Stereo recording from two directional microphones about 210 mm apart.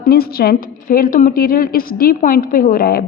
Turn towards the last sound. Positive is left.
turn(degrees=45)  # may be behind; listen again after turning